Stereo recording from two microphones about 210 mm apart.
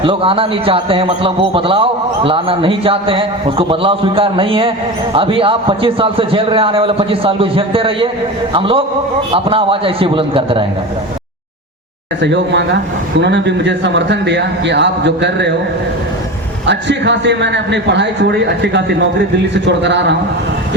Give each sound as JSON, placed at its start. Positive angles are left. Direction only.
{"t": 0.0, "sound": "a man's voice", "side_deg": -25}
{"t": 12.2, "sound": "a man's voice", "side_deg": -55}
{"t": 16.6, "sound": "a man's voice", "side_deg": -55}